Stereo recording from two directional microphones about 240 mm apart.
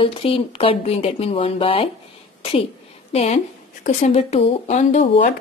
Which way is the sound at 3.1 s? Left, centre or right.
Left.